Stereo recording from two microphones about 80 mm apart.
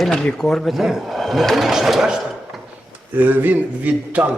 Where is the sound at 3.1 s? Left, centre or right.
Right.